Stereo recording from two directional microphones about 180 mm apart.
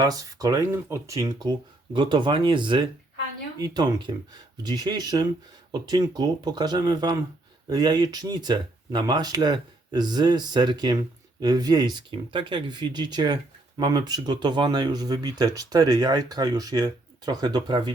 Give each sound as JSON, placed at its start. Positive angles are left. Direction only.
{"t": 0.0, "sound": "speech", "side_deg": -20}